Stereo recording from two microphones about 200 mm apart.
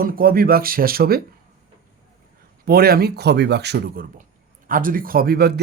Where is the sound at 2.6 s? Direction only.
50° right (ahead or behind).